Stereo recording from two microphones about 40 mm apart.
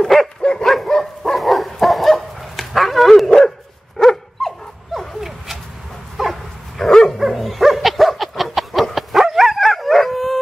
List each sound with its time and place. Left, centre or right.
0.0 s dog: centre
0.4 s dog: left
0.8 s dog: centre
6.1 s dog: centre
6.8 s dog: centre